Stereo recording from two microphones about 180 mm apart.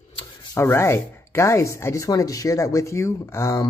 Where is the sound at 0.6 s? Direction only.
15° left (ahead or behind).